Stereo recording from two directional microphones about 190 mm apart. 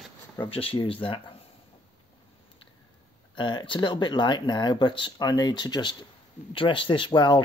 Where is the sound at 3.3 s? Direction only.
25° left (ahead or behind).